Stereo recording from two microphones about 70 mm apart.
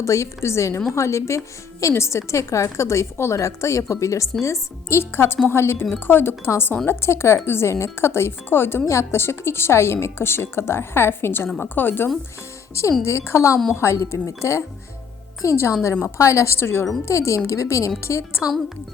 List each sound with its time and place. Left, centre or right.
0.0 s a woman's voice: left
13.1 s a woman's voice: left